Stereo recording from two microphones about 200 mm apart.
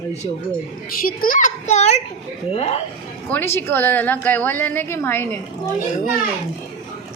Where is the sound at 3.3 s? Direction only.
10° left (ahead or behind).